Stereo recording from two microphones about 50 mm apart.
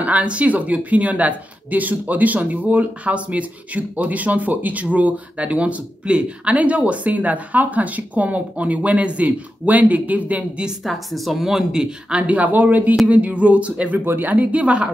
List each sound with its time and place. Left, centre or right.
0.0 s speech: right
10.8 s speech: centre; by 13.9 s right
13.9 s speech: right